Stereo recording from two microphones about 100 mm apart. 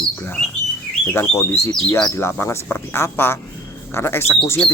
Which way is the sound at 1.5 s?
25° left (ahead or behind).